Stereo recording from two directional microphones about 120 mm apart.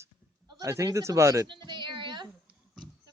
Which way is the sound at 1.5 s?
40° right (ahead or behind).